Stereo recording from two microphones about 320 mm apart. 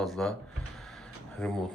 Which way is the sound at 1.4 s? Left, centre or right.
Centre.